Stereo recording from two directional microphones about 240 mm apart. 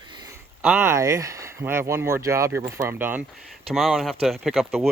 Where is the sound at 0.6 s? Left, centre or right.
Centre.